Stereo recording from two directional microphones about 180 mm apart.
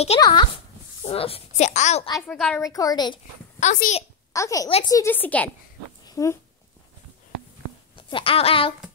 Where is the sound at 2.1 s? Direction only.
Centre (ahead or behind).